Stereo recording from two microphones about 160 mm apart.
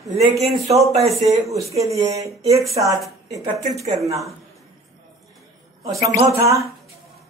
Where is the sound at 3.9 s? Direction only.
20° right (ahead or behind).